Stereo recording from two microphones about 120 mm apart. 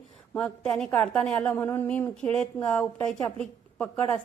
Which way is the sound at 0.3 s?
10° left (ahead or behind).